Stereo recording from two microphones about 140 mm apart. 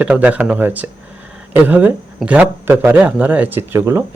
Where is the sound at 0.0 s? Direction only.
10° right (ahead or behind).